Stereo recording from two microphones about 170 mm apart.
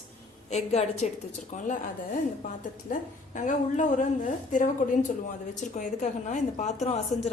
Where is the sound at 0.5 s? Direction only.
40° left (ahead or behind).